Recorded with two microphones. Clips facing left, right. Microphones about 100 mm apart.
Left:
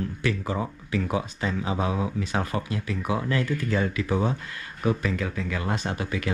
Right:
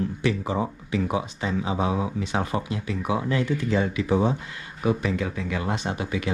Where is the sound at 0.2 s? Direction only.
20° right (ahead or behind).